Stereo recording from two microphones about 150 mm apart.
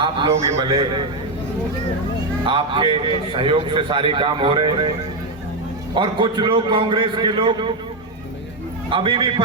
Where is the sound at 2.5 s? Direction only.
35° right (ahead or behind).